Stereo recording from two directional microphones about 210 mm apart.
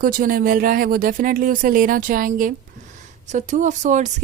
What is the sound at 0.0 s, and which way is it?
A woman's voice, 45° right (ahead or behind).